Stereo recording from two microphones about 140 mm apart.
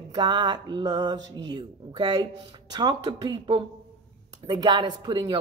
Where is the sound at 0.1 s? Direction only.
30° right (ahead or behind).